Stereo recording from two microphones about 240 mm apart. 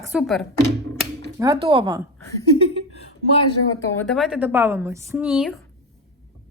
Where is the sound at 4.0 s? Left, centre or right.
Centre.